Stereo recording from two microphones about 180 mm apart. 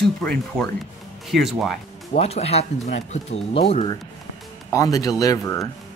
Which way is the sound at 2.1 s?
35° left (ahead or behind).